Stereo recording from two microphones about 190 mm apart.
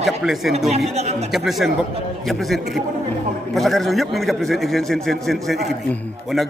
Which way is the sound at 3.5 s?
Centre (ahead or behind).